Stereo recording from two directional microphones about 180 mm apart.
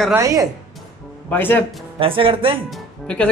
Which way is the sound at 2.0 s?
30° right (ahead or behind).